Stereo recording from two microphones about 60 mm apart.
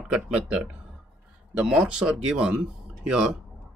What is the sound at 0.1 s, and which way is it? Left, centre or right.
Speech, centre.